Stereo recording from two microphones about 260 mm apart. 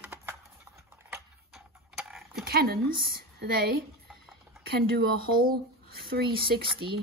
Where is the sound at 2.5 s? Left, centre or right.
Right.